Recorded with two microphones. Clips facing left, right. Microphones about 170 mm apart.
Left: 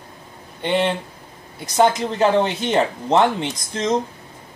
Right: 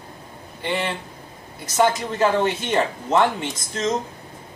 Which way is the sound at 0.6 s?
25° left (ahead or behind).